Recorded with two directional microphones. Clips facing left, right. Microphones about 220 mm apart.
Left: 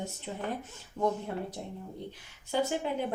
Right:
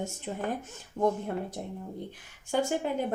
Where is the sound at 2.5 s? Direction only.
50° right (ahead or behind).